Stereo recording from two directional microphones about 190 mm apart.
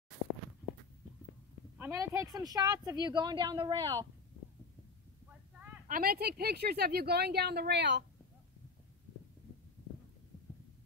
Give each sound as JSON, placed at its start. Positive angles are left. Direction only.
{"t": 1.8, "sound": "a woman's voice", "side_deg": -15}
{"t": 5.9, "sound": "speech", "side_deg": -50}